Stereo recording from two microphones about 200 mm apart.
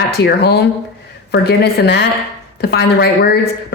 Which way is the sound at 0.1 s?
55° left (ahead or behind).